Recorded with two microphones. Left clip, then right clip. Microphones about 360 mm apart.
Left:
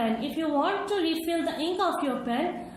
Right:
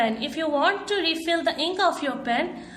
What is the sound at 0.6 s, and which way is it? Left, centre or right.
A woman's voice, right.